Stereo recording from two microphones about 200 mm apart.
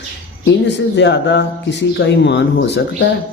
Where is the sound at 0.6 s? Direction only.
60° left (ahead or behind).